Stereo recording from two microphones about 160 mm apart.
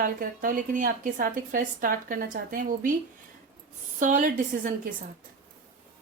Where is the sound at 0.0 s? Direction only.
60° right (ahead or behind).